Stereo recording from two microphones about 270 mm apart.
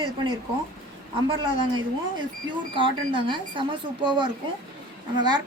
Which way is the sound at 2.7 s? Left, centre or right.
Centre.